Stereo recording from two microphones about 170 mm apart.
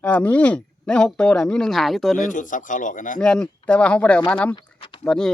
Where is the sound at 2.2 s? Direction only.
50° left (ahead or behind).